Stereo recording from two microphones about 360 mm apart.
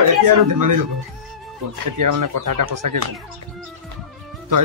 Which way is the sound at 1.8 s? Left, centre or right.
Right.